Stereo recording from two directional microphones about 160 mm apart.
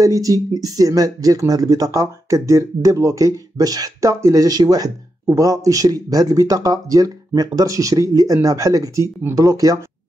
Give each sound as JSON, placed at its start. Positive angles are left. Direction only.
{"t": 0.0, "sound": "speech", "side_deg": -20}